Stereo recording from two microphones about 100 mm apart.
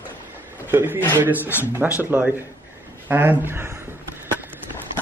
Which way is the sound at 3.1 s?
20° right (ahead or behind).